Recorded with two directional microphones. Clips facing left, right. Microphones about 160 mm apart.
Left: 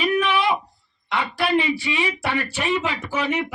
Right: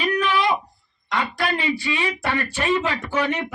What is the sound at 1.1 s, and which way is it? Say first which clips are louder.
Speech: left 3 dB; 10° left (ahead or behind).